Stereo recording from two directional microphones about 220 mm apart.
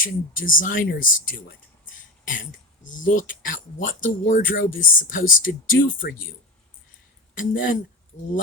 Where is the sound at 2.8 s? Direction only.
35° left (ahead or behind).